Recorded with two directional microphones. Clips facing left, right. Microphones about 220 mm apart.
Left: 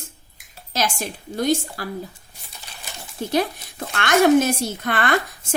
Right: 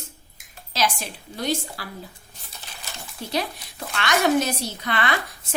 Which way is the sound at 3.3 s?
50° left (ahead or behind).